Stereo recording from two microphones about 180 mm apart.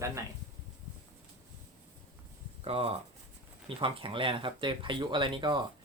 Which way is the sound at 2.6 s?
30° right (ahead or behind).